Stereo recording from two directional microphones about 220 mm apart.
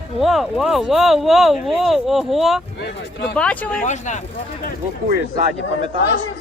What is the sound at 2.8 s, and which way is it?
Speech, 50° left (ahead or behind).